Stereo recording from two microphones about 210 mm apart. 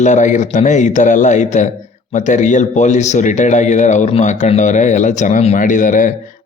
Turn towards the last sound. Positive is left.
turn(degrees=40)  # may be behind; listen again after turning